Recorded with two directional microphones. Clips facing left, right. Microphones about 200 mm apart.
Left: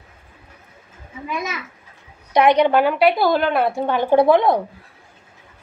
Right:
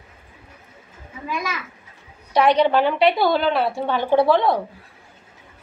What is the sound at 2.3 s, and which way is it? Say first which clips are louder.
A woman's voice: left 2 dB; 15° left (ahead or behind).